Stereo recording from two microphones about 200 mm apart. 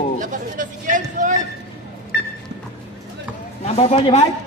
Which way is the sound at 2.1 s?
55° left (ahead or behind).